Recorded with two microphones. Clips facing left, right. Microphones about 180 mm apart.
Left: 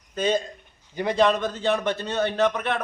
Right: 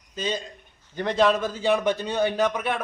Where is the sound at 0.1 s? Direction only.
55° left (ahead or behind).